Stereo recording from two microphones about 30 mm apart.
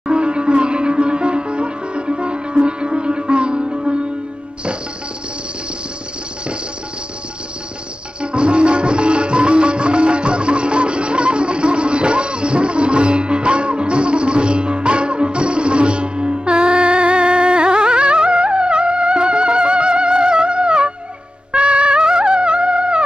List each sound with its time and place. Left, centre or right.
0.1 s sitar: right
8.2 s music: right